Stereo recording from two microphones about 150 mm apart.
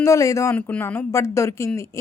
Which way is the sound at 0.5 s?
10° left (ahead or behind).